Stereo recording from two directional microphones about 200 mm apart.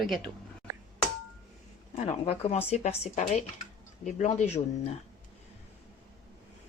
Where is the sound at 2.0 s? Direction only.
30° left (ahead or behind).